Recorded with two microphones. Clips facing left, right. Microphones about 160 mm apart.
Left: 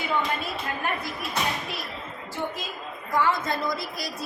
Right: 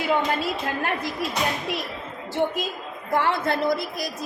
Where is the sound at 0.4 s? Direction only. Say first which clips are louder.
Right 4 dB; 90° right.